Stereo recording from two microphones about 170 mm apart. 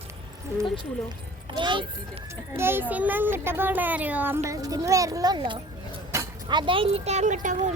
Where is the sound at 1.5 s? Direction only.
30° right (ahead or behind).